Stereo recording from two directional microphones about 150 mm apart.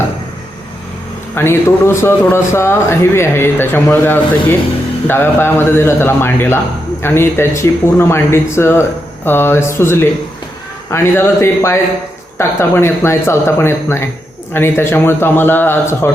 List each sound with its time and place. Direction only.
1.4 s a man's voice: 15° left (ahead or behind)